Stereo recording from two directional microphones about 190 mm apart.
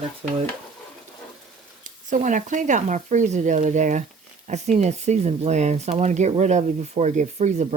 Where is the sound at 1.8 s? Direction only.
40° right (ahead or behind).